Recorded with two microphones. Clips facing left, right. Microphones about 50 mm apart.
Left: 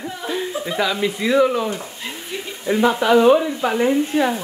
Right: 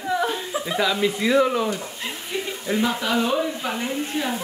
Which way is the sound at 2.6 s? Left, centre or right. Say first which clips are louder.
Left 7 dB; centre.